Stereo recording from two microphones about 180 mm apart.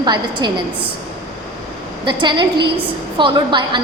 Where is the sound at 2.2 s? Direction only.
25° right (ahead or behind).